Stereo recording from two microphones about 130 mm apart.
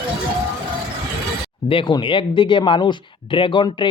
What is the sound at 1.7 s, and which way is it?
Speech, 40° left (ahead or behind).